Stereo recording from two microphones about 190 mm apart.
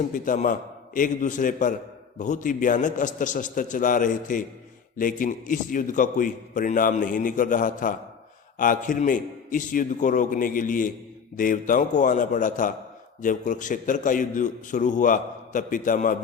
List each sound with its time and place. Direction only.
0.1 s a man's voice: 45° left (ahead or behind)